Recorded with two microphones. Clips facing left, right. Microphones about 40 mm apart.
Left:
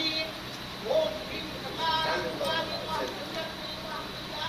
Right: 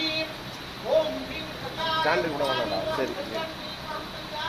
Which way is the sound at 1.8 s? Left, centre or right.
Right.